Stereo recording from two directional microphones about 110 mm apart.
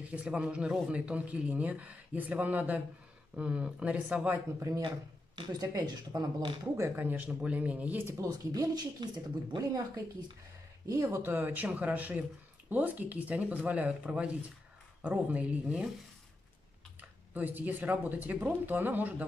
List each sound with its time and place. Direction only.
0.0 s speech: 10° right (ahead or behind)
4.6 s speech: 30° right (ahead or behind)
6.8 s speech: 15° right (ahead or behind)
8.2 s speech: 35° right (ahead or behind)
10.9 s speech: 25° right (ahead or behind); by 15.9 s 10° right (ahead or behind)
17.3 s speech: 15° right (ahead or behind)